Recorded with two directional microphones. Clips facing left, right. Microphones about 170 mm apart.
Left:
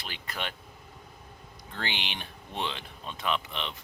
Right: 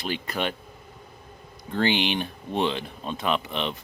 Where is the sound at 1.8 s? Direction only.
50° right (ahead or behind).